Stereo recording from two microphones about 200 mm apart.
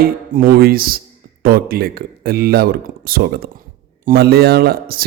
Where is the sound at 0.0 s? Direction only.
45° right (ahead or behind).